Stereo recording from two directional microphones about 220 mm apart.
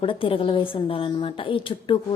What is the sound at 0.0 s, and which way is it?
A woman's voice, 25° left (ahead or behind).